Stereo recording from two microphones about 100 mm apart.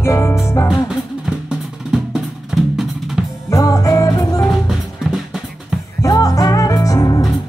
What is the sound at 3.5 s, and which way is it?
Music, 35° left (ahead or behind).